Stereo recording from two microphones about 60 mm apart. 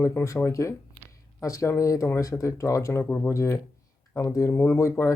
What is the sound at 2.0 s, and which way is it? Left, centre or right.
Speech, left.